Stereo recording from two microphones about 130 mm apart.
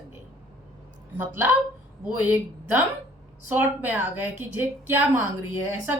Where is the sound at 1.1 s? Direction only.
15° right (ahead or behind).